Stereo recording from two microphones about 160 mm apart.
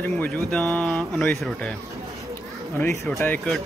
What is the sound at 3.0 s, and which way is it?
Speech, 15° left (ahead or behind).